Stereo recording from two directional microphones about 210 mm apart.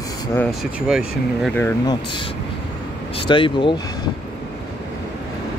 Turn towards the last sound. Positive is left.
turn(degrees=25)  # may be behind; listen again after turning